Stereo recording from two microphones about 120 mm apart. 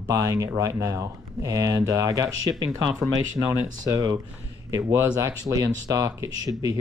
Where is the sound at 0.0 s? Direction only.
30° right (ahead or behind).